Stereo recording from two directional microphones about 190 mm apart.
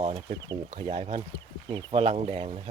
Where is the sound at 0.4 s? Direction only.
25° right (ahead or behind).